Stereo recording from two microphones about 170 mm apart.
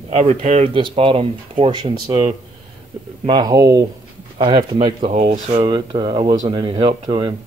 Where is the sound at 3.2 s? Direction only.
25° right (ahead or behind).